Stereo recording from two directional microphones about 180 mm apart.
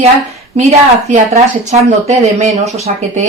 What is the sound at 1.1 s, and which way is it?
Speech, 35° right (ahead or behind).